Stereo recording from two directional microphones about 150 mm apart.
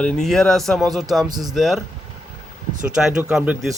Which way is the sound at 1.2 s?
25° right (ahead or behind).